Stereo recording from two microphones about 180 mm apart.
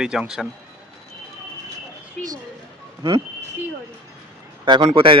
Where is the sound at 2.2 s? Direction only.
Centre (ahead or behind).